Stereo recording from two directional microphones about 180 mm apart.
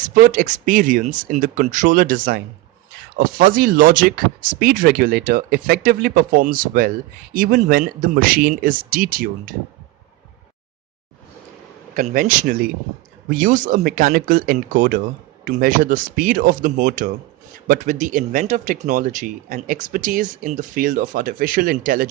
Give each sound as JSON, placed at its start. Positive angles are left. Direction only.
{"t": 0.1, "sound": "speech", "side_deg": -50}
{"t": 11.9, "sound": "speech", "side_deg": -50}